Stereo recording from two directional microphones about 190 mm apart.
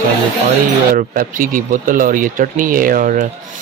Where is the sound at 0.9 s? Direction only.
45° right (ahead or behind).